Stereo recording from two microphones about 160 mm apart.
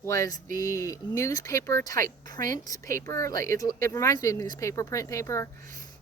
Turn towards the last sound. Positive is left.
turn(degrees=20)  # may be behind; listen again after turning